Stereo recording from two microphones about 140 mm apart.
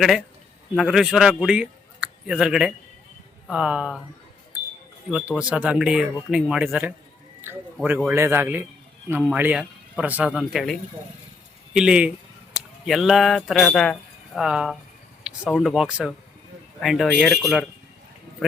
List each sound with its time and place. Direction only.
0.0 s speech: centre (ahead or behind)
5.1 s speech: 5° right (ahead or behind)